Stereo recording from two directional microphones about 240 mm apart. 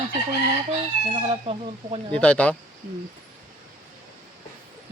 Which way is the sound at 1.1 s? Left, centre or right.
Right.